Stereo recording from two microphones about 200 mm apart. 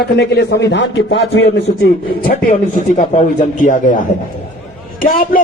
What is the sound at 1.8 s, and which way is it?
A man's voice, 45° left (ahead or behind).